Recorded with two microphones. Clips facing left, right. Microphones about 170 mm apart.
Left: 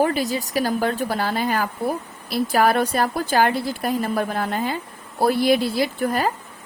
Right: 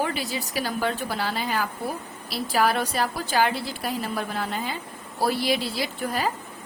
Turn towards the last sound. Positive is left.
turn(degrees=50)  # may be behind; listen again after turning